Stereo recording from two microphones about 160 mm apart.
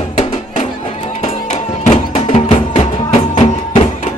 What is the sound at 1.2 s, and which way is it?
Music, 40° left (ahead or behind).